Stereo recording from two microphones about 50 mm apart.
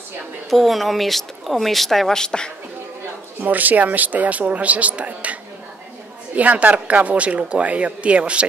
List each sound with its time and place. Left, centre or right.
0.5 s a woman's voice: centre
2.2 s speech: centre
3.4 s speech: right